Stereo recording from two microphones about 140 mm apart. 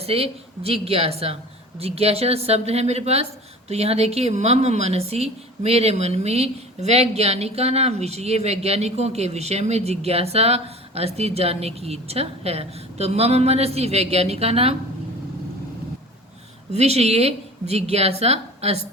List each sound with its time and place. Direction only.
0.0 s speech: 45° right (ahead or behind)
16.7 s speech: 50° right (ahead or behind)